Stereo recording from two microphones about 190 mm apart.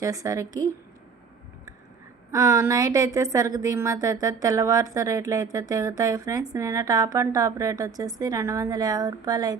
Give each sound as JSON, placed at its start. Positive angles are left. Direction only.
{"t": 0.0, "sound": "a woman's voice", "side_deg": -15}
{"t": 2.3, "sound": "a woman's voice", "side_deg": -15}